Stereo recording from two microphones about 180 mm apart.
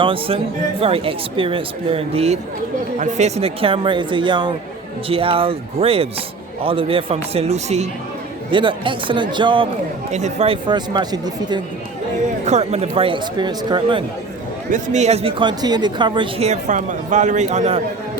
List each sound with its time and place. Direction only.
0.0 s speech: 30° right (ahead or behind)
8.4 s speech: 25° right (ahead or behind)
10.1 s speech: 40° right (ahead or behind); by 11.6 s 25° right (ahead or behind)
12.5 s speech: 35° right (ahead or behind)
14.7 s speech: 40° right (ahead or behind)